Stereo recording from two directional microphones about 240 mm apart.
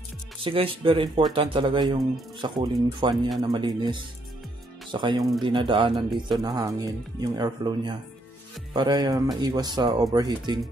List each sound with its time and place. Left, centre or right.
0.4 s speech: right